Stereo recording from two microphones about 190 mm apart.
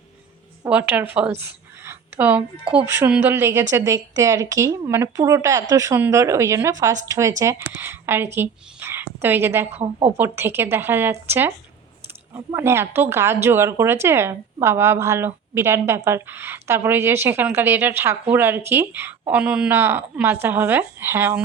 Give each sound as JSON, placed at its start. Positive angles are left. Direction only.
{"t": 0.6, "sound": "a woman's voice", "side_deg": -10}